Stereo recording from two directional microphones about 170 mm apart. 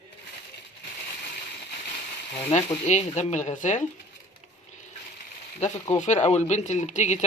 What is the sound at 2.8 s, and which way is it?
Speech, 40° left (ahead or behind).